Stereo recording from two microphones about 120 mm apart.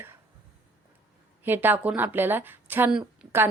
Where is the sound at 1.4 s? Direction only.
15° right (ahead or behind).